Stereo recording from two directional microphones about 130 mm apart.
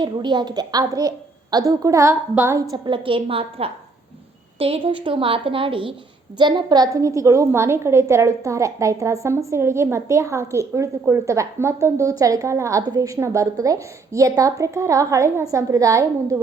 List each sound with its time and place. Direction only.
0.0 s a woman's voice: 35° right (ahead or behind)